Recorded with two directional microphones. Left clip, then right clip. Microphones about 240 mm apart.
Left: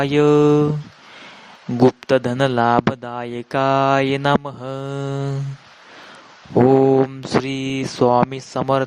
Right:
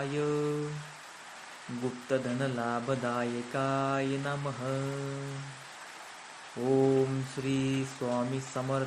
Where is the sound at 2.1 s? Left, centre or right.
Left.